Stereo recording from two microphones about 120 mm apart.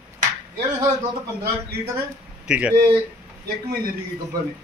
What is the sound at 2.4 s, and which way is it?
Speech, 10° right (ahead or behind).